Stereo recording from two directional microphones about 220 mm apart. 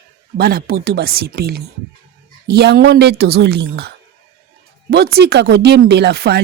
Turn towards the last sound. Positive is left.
turn(degrees=-45)  # may be behind; listen again after turning